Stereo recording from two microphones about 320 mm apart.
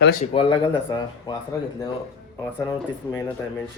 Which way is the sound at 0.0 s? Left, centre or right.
Left.